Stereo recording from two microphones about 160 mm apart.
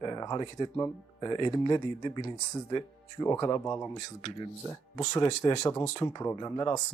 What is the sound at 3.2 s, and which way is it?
Speech, 15° left (ahead or behind).